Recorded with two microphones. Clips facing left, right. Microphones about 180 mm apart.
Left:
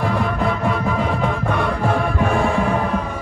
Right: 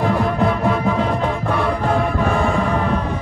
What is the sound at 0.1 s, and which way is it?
Music, centre (ahead or behind).